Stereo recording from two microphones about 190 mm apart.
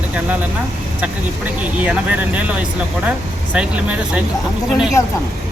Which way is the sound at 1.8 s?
10° right (ahead or behind).